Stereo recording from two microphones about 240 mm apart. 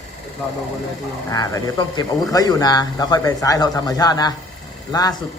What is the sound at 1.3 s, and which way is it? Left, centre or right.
Speech, centre.